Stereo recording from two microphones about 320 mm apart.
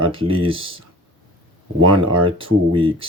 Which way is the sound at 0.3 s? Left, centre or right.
Centre.